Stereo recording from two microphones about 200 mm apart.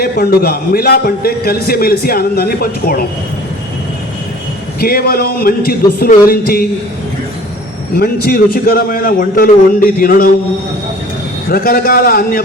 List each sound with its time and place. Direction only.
0.0 s a man's voice: 50° left (ahead or behind)
4.8 s a man's voice: 50° left (ahead or behind)
7.9 s a man's voice: 50° left (ahead or behind)
11.4 s a man's voice: 50° left (ahead or behind)